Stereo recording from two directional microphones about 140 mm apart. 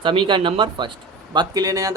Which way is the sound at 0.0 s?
35° right (ahead or behind).